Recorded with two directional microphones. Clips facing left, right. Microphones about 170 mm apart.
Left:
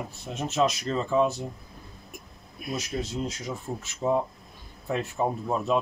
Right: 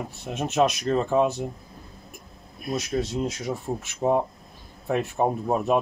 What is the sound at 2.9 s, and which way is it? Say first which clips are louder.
Speech: right 6 dB; 55° right (ahead or behind).